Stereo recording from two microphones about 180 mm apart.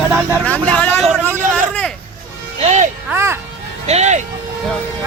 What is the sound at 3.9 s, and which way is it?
Speech, 40° right (ahead or behind).